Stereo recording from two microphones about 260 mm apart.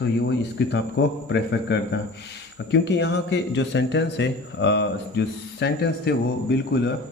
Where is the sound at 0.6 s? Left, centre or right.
Left.